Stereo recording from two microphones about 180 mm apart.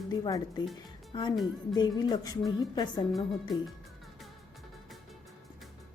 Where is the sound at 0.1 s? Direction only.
20° left (ahead or behind).